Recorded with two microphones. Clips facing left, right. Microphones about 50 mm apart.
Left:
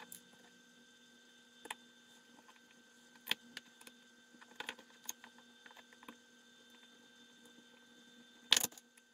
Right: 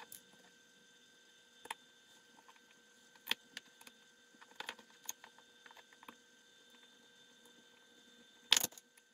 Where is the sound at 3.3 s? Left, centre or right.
Centre.